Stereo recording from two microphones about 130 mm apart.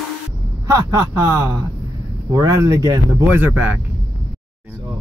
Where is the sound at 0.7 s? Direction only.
25° right (ahead or behind).